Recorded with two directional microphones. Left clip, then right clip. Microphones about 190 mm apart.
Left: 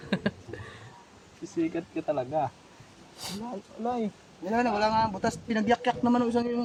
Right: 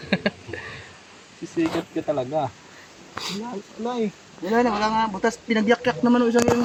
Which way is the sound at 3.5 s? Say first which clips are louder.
Right 3 dB; 5° left (ahead or behind).